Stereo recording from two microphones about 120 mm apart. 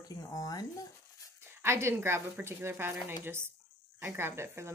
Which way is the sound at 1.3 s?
20° right (ahead or behind).